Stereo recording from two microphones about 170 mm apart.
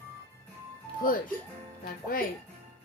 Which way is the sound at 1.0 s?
55° left (ahead or behind).